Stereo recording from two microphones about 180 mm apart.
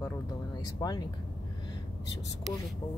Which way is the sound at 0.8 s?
20° left (ahead or behind).